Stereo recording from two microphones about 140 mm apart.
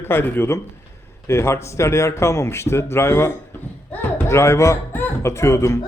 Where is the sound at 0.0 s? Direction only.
15° left (ahead or behind).